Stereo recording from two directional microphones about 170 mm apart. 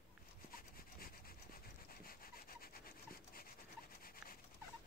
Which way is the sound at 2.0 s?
60° left (ahead or behind).